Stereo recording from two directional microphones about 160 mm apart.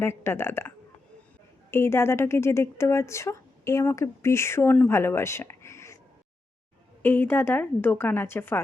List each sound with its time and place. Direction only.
0.0 s speech: 15° left (ahead or behind)
1.7 s speech: 15° left (ahead or behind)
7.0 s speech: 10° left (ahead or behind)